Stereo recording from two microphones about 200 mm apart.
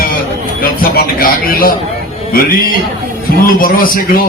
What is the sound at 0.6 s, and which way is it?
A man's voice, 45° left (ahead or behind).